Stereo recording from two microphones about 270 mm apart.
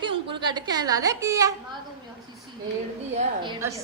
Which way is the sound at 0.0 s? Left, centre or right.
Centre.